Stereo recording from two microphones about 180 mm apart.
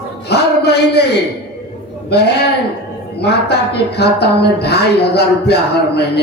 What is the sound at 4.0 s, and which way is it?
A man's voice, 65° left (ahead or behind).